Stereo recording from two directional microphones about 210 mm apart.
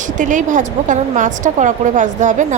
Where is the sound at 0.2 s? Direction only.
40° right (ahead or behind).